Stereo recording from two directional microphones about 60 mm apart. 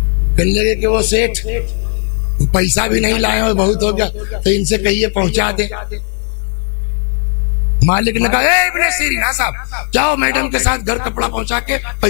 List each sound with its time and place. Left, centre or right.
0.4 s speech: centre
7.8 s speech: left